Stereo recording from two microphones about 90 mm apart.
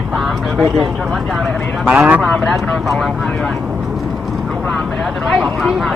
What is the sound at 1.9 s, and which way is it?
Speech, 15° right (ahead or behind).